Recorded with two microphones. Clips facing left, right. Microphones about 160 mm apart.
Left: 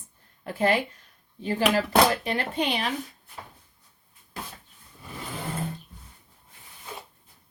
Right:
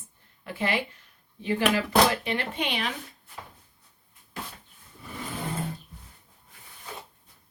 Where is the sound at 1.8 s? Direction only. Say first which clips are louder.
Left 1 dB; 40° left (ahead or behind).